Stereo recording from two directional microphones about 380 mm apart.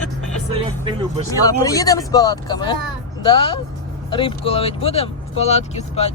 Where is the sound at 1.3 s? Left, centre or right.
Centre.